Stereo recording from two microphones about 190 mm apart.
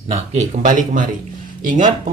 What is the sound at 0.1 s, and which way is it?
A man's voice, 40° right (ahead or behind).